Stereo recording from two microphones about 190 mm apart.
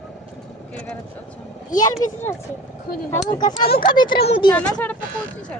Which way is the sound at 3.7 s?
50° left (ahead or behind).